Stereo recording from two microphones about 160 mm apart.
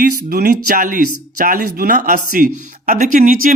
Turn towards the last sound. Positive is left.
turn(degrees=-60)  # may be behind; listen again after turning